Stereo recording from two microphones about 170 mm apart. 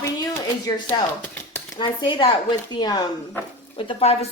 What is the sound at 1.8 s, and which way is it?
A woman's voice, 30° left (ahead or behind).